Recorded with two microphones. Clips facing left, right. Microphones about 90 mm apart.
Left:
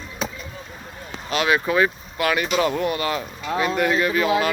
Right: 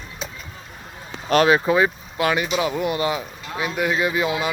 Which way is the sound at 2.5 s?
5° right (ahead or behind).